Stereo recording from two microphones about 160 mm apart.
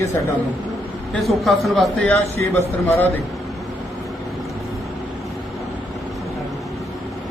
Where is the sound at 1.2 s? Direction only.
Centre (ahead or behind).